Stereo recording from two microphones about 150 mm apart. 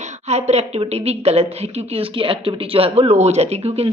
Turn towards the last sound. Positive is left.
turn(degrees=-45)  # may be behind; listen again after turning